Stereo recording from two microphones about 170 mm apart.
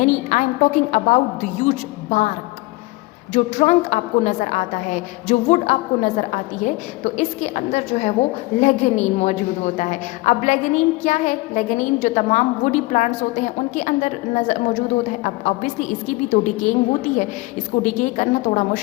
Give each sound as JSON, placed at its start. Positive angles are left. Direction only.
{"t": 0.0, "sound": "a woman's voice", "side_deg": 45}
{"t": 3.3, "sound": "a woman's voice", "side_deg": 45}